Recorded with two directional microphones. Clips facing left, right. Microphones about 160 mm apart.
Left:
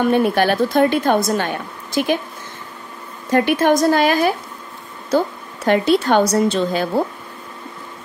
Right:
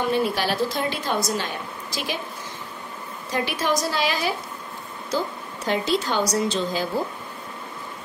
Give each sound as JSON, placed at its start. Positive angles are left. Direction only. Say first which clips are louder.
{"t": 0.1, "sound": "a woman's voice", "louder": "left 7 dB", "side_deg": 55}
{"t": 3.3, "sound": "a woman's voice", "louder": "left 10 dB", "side_deg": 55}
{"t": 5.7, "sound": "a woman's voice", "louder": "left 9 dB", "side_deg": 60}